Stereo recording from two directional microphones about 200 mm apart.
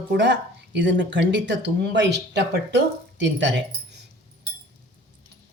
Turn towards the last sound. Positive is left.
turn(degrees=-65)  # may be behind; listen again after turning